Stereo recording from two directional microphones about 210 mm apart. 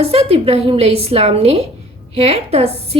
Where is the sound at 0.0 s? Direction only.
25° right (ahead or behind).